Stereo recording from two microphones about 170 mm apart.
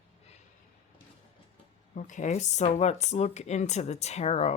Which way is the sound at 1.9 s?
50° left (ahead or behind).